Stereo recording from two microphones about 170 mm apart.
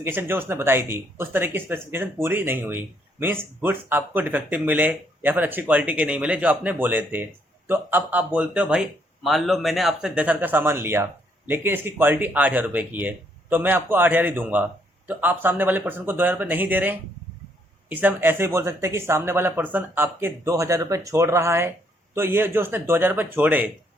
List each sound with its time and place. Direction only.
0.0 s speech: 15° right (ahead or behind)